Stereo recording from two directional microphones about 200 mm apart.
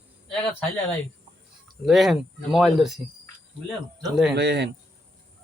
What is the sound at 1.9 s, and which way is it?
Speech, centre (ahead or behind).